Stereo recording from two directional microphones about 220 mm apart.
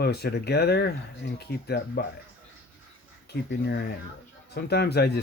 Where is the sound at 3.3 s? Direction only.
50° left (ahead or behind).